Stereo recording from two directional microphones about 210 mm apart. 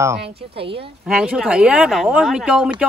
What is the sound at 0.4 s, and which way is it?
Speech, 25° right (ahead or behind).